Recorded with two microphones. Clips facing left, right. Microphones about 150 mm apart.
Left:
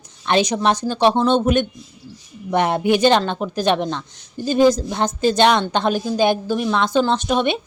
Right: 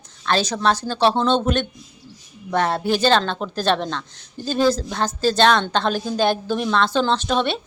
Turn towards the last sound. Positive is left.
turn(degrees=15)  # may be behind; listen again after turning